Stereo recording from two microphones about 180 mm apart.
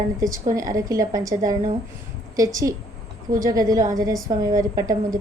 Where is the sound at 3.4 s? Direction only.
20° right (ahead or behind).